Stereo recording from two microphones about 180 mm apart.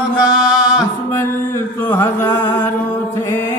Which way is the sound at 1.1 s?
15° left (ahead or behind).